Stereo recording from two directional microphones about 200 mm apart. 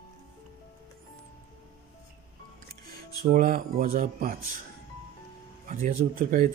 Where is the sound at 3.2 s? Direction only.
45° right (ahead or behind).